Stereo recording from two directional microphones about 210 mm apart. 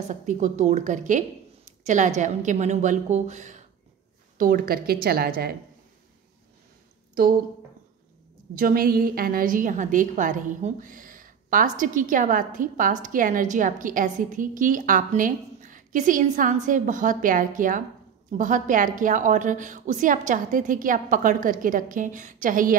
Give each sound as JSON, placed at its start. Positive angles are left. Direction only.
{"t": 0.1, "sound": "a woman's voice", "side_deg": -35}
{"t": 8.5, "sound": "a woman's voice", "side_deg": -45}